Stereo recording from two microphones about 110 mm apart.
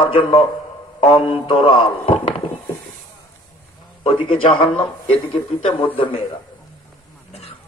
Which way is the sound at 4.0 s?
55° left (ahead or behind).